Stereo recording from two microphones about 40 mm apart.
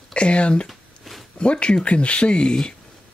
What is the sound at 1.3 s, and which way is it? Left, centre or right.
Speech, left.